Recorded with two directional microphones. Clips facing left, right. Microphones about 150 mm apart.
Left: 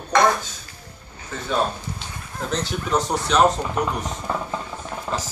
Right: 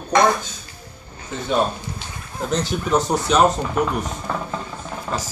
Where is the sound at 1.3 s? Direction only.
20° right (ahead or behind).